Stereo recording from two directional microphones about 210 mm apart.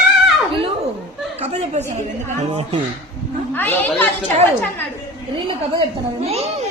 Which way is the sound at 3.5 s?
10° left (ahead or behind).